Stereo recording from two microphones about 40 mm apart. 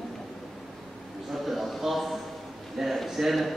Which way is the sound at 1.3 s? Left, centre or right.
Centre.